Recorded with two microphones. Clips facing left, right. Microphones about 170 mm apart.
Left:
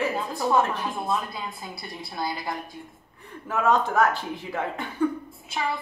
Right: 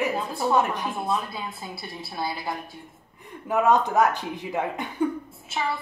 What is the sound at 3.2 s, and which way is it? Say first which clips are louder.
Speech: right 2 dB; 15° right (ahead or behind).